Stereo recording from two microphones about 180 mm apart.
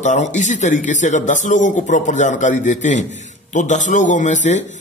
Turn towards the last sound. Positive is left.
turn(degrees=40)  # may be behind; listen again after turning